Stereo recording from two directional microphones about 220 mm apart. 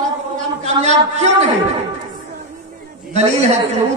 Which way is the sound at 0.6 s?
30° right (ahead or behind).